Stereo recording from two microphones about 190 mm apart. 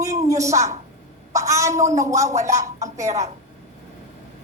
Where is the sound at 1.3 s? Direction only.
15° right (ahead or behind).